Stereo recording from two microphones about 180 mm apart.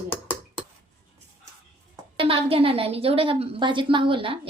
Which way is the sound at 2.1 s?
30° right (ahead or behind).